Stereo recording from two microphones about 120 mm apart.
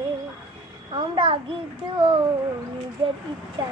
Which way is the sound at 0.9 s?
50° right (ahead or behind).